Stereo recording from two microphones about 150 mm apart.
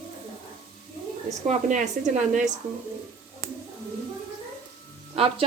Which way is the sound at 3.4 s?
20° left (ahead or behind).